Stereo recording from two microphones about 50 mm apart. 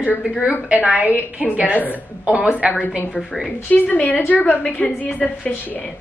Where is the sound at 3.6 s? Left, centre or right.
Left.